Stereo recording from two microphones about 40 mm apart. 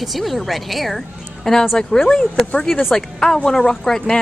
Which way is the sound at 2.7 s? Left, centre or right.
Centre.